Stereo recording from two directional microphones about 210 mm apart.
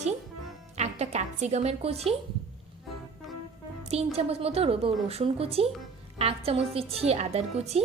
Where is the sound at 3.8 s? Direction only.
30° right (ahead or behind).